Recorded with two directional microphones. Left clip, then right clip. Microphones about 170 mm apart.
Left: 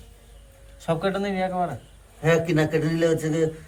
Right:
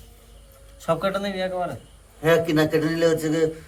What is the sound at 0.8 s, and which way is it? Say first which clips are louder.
Speech: right 2 dB; 50° right (ahead or behind).